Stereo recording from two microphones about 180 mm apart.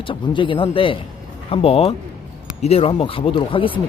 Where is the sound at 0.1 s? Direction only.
30° left (ahead or behind).